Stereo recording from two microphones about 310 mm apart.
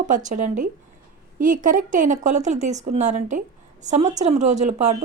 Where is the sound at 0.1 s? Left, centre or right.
Right.